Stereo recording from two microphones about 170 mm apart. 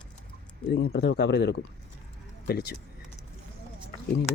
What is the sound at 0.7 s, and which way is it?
Speech, 75° left (ahead or behind).